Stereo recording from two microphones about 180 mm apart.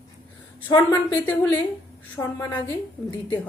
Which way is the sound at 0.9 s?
10° left (ahead or behind).